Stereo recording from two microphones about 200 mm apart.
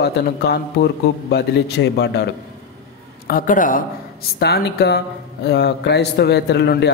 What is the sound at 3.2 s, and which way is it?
Speech, 45° left (ahead or behind).